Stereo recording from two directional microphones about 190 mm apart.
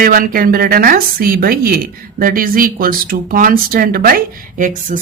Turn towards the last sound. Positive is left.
turn(degrees=-45)  # may be behind; listen again after turning